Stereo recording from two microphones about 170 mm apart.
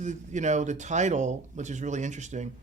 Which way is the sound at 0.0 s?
45° right (ahead or behind).